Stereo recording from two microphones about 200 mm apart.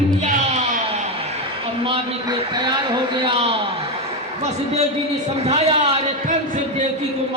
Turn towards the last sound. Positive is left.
turn(degrees=-35)  # may be behind; listen again after turning